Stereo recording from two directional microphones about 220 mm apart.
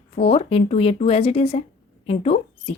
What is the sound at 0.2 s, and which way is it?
A woman's voice, 25° left (ahead or behind).